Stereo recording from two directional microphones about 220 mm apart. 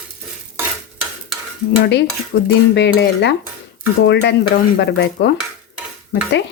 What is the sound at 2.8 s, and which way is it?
Dishes, 50° left (ahead or behind).